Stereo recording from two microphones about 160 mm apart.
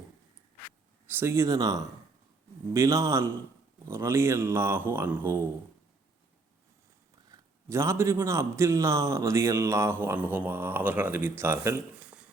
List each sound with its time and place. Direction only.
1.0 s a man's voice: 15° right (ahead or behind)
7.3 s a man's voice: 15° right (ahead or behind)